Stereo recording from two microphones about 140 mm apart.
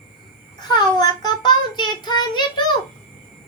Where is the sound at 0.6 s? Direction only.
30° left (ahead or behind).